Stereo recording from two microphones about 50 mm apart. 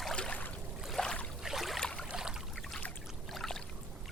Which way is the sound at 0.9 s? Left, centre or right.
Centre.